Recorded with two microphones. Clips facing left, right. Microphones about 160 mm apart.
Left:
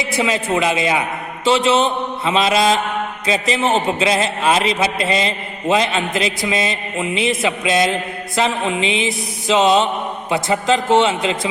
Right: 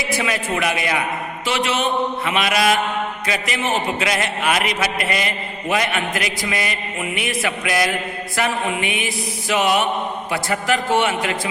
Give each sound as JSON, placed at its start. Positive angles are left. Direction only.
{"t": 0.0, "sound": "a man's voice", "side_deg": 25}